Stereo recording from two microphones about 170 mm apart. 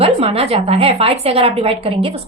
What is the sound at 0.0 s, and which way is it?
A woman's voice, 35° right (ahead or behind).